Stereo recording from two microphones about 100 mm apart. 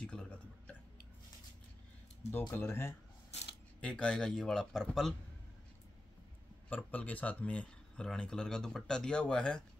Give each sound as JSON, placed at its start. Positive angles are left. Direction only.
{"t": 0.0, "sound": "a sound", "side_deg": 10}
{"t": 2.5, "sound": "speech", "side_deg": 25}
{"t": 3.8, "sound": "speech", "side_deg": 10}
{"t": 6.7, "sound": "speech", "side_deg": 15}